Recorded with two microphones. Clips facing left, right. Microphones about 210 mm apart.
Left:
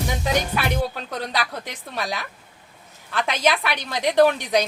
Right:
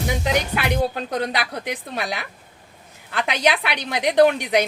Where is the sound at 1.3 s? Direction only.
15° right (ahead or behind).